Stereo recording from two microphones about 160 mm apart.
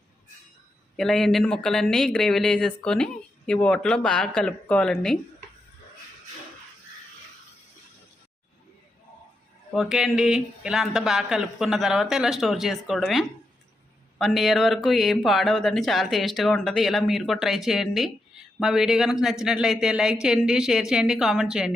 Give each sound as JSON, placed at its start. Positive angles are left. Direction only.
{"t": 0.9, "sound": "speech", "side_deg": 0}
{"t": 9.7, "sound": "speech", "side_deg": 0}
{"t": 14.2, "sound": "speech", "side_deg": 0}